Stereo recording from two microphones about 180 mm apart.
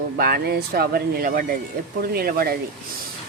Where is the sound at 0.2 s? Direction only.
55° right (ahead or behind).